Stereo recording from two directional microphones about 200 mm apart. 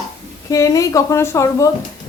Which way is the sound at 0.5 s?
15° left (ahead or behind).